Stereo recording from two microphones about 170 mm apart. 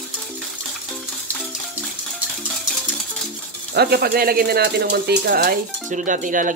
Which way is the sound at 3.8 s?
70° right (ahead or behind).